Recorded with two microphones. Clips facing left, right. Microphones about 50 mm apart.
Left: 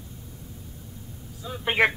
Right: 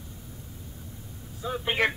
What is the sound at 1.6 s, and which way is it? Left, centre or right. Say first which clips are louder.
Speech: left 4 dB; centre.